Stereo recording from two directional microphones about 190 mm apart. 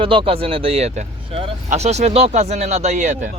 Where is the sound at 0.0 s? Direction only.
25° right (ahead or behind).